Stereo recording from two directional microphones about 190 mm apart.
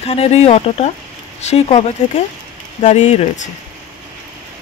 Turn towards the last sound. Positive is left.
turn(degrees=35)  # may be behind; listen again after turning